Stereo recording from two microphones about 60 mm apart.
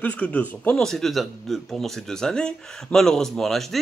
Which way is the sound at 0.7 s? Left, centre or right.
Centre.